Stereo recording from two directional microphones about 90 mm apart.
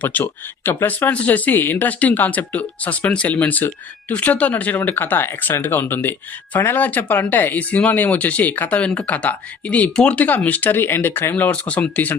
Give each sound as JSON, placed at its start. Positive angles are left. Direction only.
{"t": 0.0, "sound": "speech", "side_deg": 20}